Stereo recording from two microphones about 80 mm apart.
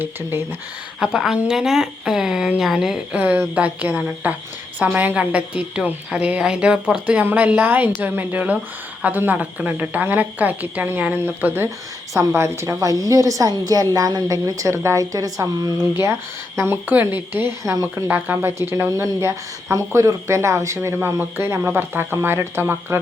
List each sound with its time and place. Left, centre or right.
0.0 s a woman's voice: right
0.9 s speech: centre
3.2 s a woman's voice: right
12.1 s speech: right
16.9 s a woman's voice: right
17.6 s a woman's voice: right
18.1 s a woman's voice: right